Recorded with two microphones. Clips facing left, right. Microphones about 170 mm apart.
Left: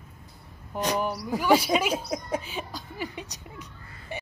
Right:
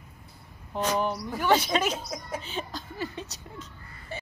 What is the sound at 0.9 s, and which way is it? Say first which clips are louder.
Speech: left 1 dB; 10° left (ahead or behind).